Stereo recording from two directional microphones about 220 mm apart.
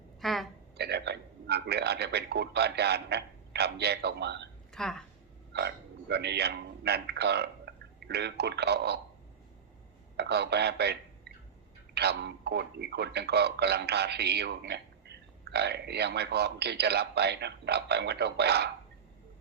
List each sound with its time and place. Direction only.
0.2 s a sound: centre (ahead or behind)
0.8 s a man's voice: 50° right (ahead or behind)
4.7 s speech: 5° left (ahead or behind)
5.5 s a man's voice: 50° right (ahead or behind)
10.2 s a man's voice: 50° right (ahead or behind)
11.9 s a man's voice: 50° right (ahead or behind)